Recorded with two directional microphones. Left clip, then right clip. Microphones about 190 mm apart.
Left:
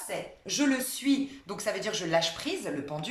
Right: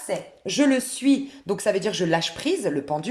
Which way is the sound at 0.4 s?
45° right (ahead or behind).